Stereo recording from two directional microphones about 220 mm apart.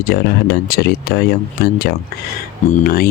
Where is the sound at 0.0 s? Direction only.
45° left (ahead or behind).